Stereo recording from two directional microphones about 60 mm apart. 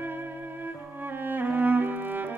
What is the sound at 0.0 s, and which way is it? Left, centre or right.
Music, right.